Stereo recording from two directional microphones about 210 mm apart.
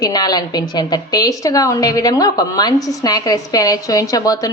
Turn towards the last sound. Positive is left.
turn(degrees=15)  # may be behind; listen again after turning